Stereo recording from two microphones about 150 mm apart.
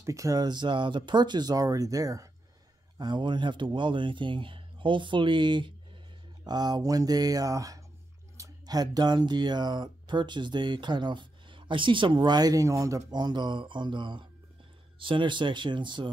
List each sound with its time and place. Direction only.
0.0 s speech: 20° right (ahead or behind)